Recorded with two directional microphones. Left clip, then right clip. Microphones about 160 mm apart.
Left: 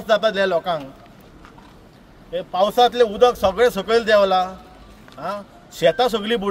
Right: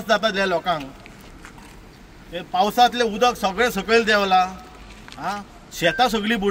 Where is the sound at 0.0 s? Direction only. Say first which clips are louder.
Left 2 dB; 45° left (ahead or behind).